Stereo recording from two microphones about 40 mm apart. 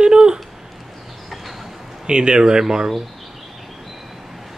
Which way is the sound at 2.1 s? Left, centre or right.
Right.